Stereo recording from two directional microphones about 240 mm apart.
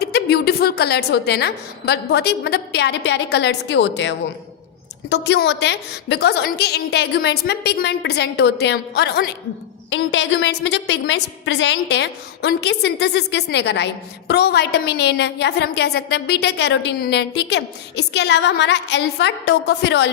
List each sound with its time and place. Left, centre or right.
0.0 s a woman's voice: left